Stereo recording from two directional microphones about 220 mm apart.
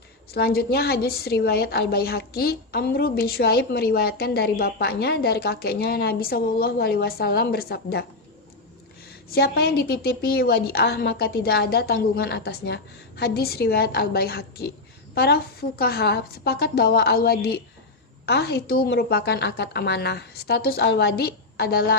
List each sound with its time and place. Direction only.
0.3 s a woman's voice: 45° left (ahead or behind)
9.3 s a woman's voice: 45° left (ahead or behind)